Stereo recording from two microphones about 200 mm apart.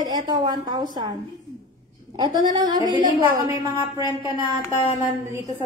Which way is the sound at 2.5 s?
20° right (ahead or behind).